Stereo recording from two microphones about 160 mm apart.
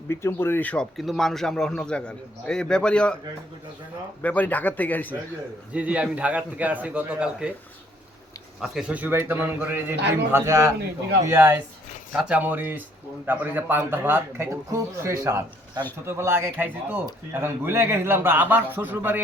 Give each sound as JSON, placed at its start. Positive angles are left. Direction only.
{"t": 0.1, "sound": "speech", "side_deg": 15}
{"t": 4.2, "sound": "speech", "side_deg": 10}
{"t": 5.7, "sound": "a man's voice", "side_deg": -10}
{"t": 8.6, "sound": "a man's voice", "side_deg": -5}